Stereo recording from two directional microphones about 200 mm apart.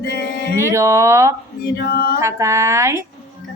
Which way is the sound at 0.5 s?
15° right (ahead or behind).